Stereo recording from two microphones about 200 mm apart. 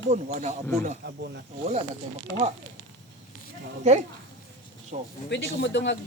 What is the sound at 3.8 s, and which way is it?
Speech, 35° right (ahead or behind).